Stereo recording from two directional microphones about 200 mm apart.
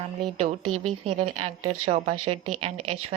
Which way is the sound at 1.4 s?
30° right (ahead or behind).